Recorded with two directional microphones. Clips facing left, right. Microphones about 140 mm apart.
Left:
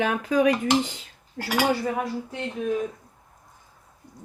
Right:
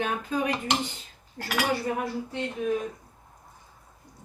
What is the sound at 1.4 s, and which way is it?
Cutlery, 75° left (ahead or behind).